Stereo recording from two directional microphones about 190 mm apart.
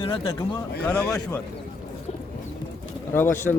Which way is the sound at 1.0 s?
5° left (ahead or behind).